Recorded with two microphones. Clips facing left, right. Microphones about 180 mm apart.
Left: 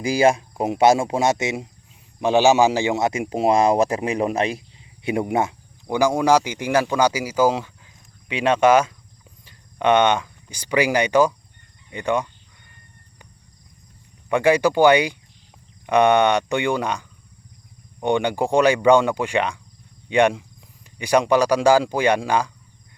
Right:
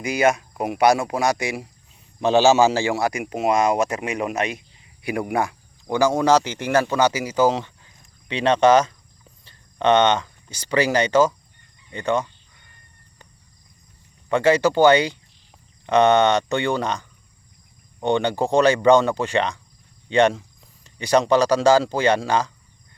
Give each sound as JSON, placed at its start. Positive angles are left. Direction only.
{"t": 0.0, "sound": "speech", "side_deg": 30}
{"t": 14.3, "sound": "speech", "side_deg": 10}